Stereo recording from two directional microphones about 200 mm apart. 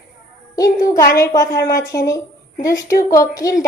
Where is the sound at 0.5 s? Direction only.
15° left (ahead or behind).